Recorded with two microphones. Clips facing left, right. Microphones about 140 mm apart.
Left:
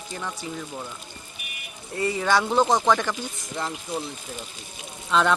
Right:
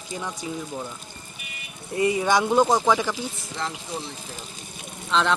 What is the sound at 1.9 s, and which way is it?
Speech, 15° right (ahead or behind).